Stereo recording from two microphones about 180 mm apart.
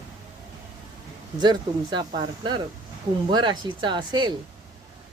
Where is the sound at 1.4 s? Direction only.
25° right (ahead or behind).